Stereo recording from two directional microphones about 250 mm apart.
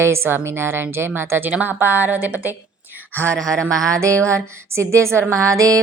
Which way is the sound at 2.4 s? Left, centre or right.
Centre.